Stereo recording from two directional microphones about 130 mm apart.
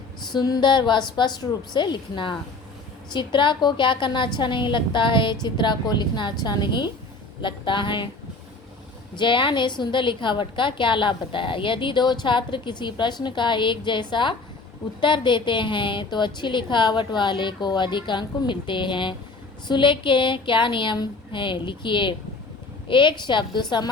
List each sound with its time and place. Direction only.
0.3 s a woman's voice: 30° left (ahead or behind)
9.1 s a woman's voice: 40° left (ahead or behind)